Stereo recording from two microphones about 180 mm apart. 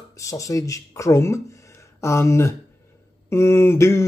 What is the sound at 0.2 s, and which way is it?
Speech, 20° left (ahead or behind).